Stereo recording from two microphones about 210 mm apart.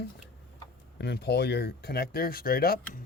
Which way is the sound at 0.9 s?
50° left (ahead or behind).